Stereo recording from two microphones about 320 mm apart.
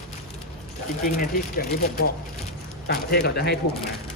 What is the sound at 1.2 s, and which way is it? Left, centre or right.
Speech, left.